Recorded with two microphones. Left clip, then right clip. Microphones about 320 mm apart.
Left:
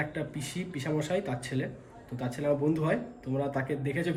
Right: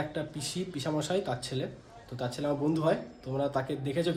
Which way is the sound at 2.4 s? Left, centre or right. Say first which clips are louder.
Left 3 dB; centre.